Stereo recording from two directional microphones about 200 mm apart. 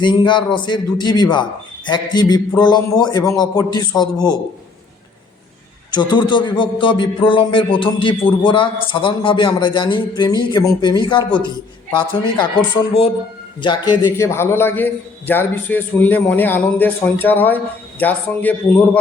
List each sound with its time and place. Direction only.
0.0 s a man's voice: 20° left (ahead or behind)
5.9 s a man's voice: 20° left (ahead or behind)